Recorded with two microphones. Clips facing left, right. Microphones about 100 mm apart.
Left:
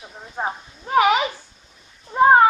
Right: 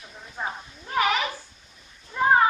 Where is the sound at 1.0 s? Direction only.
60° left (ahead or behind).